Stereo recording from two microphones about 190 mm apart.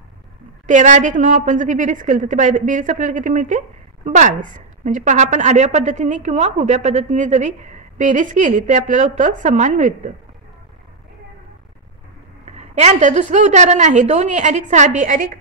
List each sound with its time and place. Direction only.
0.7 s a woman's voice: 40° right (ahead or behind)
12.4 s a woman's voice: 35° right (ahead or behind)